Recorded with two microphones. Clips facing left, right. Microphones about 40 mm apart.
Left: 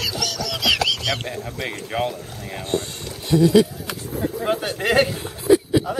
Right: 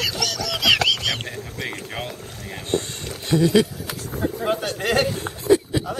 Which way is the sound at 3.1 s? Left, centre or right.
Centre.